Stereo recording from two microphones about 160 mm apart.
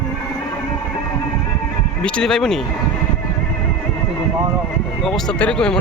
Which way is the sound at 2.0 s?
5° left (ahead or behind).